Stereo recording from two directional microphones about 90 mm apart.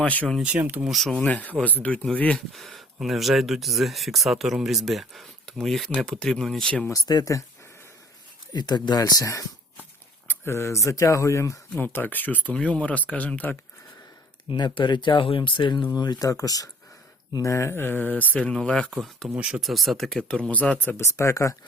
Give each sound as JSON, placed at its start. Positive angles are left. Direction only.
{"t": 0.0, "sound": "speech", "side_deg": 15}
{"t": 0.4, "sound": "speech", "side_deg": -20}
{"t": 0.9, "sound": "speech", "side_deg": 0}
{"t": 1.2, "sound": "speech", "side_deg": 15}
{"t": 2.5, "sound": "speech", "side_deg": 0}
{"t": 6.9, "sound": "speech", "side_deg": 45}
{"t": 8.5, "sound": "speech", "side_deg": 55}
{"t": 10.2, "sound": "speech", "side_deg": 30}
{"t": 11.7, "sound": "speech", "side_deg": 20}
{"t": 14.5, "sound": "speech", "side_deg": 55}
{"t": 16.0, "sound": "speech", "side_deg": 45}
{"t": 19.4, "sound": "speech", "side_deg": -10}
{"t": 19.7, "sound": "speech", "side_deg": 0}
{"t": 20.9, "sound": "speech", "side_deg": 35}